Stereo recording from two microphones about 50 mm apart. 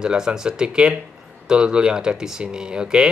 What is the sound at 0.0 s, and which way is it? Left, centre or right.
Speech, centre.